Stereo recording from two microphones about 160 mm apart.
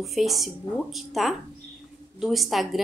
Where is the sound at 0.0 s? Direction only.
Centre (ahead or behind).